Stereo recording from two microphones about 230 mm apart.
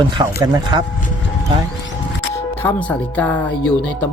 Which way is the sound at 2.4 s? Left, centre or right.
Centre.